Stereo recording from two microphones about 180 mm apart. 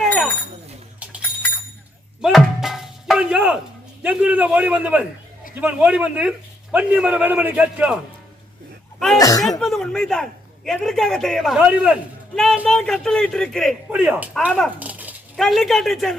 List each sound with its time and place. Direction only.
0.0 s a sound: centre (ahead or behind)
2.2 s music: centre (ahead or behind)
4.0 s a man's voice: 10° right (ahead or behind)
9.1 s speech: 20° left (ahead or behind)
9.4 s speech: centre (ahead or behind)
13.9 s a man's voice: 10° right (ahead or behind)
14.8 s speech: 10° right (ahead or behind)